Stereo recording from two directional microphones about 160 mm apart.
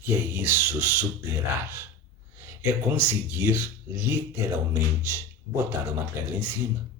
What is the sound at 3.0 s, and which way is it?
Speech, 10° right (ahead or behind).